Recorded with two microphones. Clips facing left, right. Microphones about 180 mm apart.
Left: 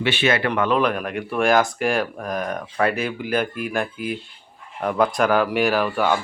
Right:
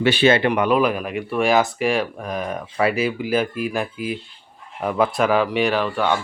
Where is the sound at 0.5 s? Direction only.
10° right (ahead or behind).